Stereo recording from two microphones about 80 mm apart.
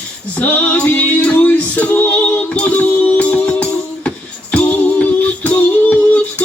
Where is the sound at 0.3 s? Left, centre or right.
Left.